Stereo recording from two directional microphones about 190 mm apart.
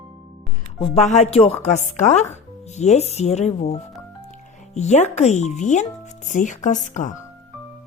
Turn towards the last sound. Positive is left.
turn(degrees=40)  # may be behind; listen again after turning